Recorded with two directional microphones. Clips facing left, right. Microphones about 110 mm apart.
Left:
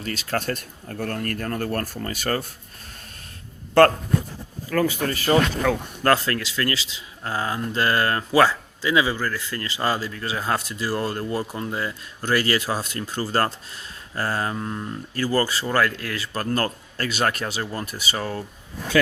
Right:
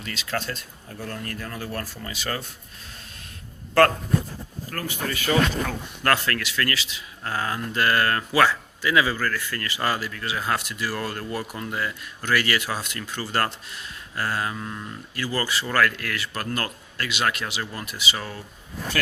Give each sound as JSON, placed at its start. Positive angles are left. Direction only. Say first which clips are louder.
{"t": 0.0, "sound": "speech", "louder": "left 3 dB", "side_deg": 40}
{"t": 5.0, "sound": "speech", "louder": "left 3 dB", "side_deg": 40}